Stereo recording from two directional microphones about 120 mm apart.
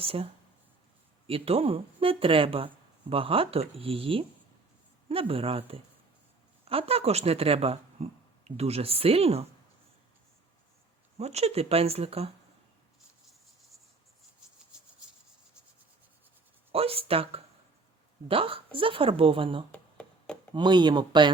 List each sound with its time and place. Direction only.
0.0 s speech: 55° right (ahead or behind)
1.3 s speech: 55° right (ahead or behind)
11.2 s speech: 65° right (ahead or behind)
16.7 s speech: 55° right (ahead or behind)
19.7 s a sound: 10° left (ahead or behind)
20.5 s speech: 40° right (ahead or behind)